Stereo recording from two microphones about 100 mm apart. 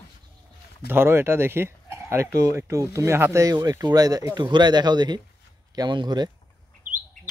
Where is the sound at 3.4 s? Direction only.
40° right (ahead or behind).